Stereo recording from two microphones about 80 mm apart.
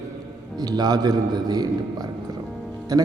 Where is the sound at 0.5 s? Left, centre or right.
Right.